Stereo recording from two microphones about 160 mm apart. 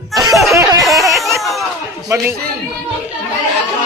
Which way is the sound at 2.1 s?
20° right (ahead or behind).